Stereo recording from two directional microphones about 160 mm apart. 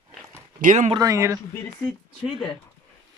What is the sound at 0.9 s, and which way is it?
Speech, 25° right (ahead or behind).